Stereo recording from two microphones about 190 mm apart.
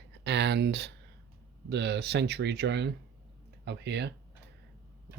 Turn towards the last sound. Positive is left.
turn(degrees=-65)  # may be behind; listen again after turning